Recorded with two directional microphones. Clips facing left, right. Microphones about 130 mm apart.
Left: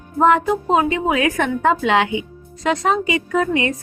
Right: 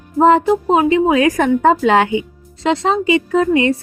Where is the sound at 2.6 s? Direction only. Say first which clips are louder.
Right 3 dB; 30° right (ahead or behind).